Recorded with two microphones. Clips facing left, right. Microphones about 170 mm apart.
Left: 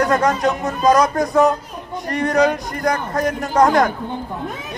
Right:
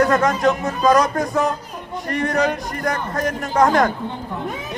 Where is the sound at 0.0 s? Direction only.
35° left (ahead or behind).